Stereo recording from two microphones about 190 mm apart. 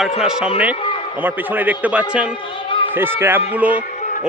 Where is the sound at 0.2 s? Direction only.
5° right (ahead or behind).